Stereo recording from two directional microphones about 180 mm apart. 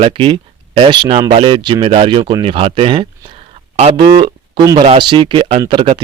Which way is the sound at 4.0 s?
25° right (ahead or behind).